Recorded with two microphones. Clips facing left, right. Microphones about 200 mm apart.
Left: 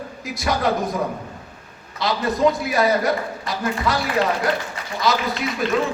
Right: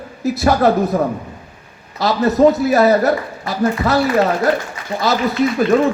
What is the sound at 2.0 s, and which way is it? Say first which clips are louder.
A man's voice: right 7 dB; 45° right (ahead or behind).